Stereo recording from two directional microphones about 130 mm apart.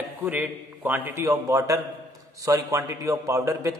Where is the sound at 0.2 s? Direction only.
15° right (ahead or behind).